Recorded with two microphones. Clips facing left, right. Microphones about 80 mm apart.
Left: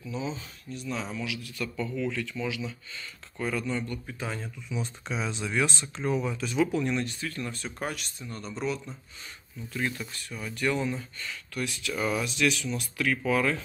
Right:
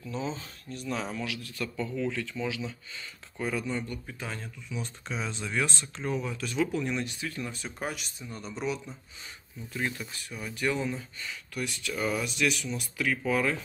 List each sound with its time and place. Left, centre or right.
0.2 s speech: right
0.7 s speech: right
1.8 s speech: right
4.2 s speech: centre
6.7 s speech: centre
7.0 s speech: centre